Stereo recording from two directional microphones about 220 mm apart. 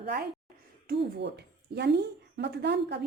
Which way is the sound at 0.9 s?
45° right (ahead or behind).